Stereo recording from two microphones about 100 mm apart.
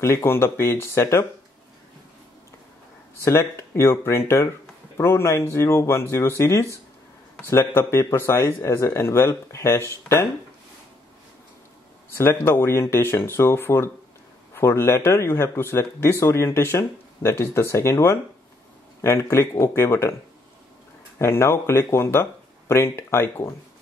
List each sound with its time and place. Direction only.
0.0 s speech: 25° left (ahead or behind)
3.2 s speech: 30° left (ahead or behind)
12.1 s speech: 25° left (ahead or behind)
21.2 s speech: 25° left (ahead or behind)